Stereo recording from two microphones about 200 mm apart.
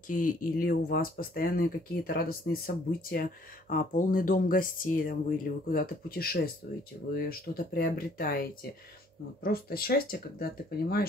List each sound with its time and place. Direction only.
0.1 s speech: 45° left (ahead or behind)